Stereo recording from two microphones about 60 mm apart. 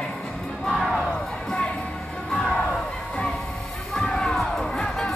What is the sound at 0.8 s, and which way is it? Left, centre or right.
Crowd, centre.